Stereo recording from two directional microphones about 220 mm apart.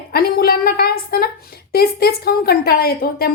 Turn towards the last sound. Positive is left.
turn(degrees=45)  # may be behind; listen again after turning